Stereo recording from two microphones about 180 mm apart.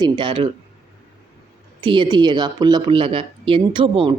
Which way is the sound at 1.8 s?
25° right (ahead or behind).